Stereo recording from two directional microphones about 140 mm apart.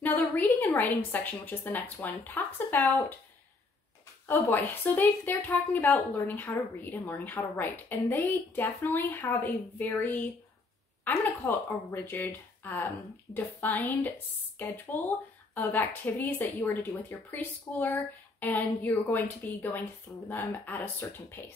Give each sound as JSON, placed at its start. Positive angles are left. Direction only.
{"t": 0.0, "sound": "speech", "side_deg": 15}
{"t": 4.3, "sound": "speech", "side_deg": 15}